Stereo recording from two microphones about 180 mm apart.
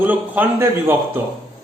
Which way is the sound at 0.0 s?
10° right (ahead or behind).